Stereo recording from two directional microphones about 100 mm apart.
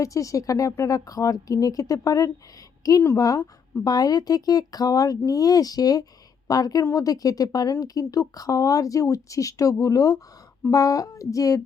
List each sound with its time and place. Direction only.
0.0 s a woman's voice: 35° left (ahead or behind)